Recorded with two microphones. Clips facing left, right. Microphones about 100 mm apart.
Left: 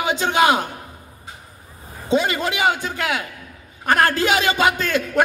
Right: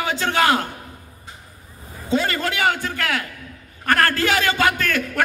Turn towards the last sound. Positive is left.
turn(degrees=20)  # may be behind; listen again after turning